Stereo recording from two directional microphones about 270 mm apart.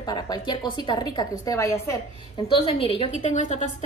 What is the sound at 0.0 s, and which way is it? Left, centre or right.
A woman's voice, centre.